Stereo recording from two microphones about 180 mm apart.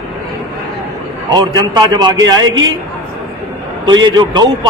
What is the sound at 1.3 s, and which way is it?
A man's voice, 20° right (ahead or behind).